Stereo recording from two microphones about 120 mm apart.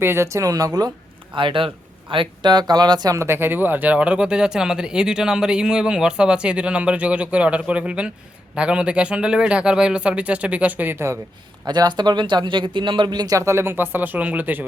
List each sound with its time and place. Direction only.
0.0 s speech: 20° right (ahead or behind)
1.3 s speech: 45° right (ahead or behind); by 11.2 s 20° right (ahead or behind)
11.6 s speech: 35° right (ahead or behind); by 14.6 s 15° right (ahead or behind)